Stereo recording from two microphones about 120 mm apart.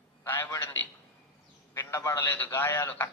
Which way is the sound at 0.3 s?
15° left (ahead or behind).